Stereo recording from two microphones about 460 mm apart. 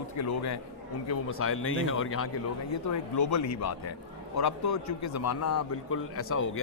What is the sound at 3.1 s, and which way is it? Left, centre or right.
A man's voice, left.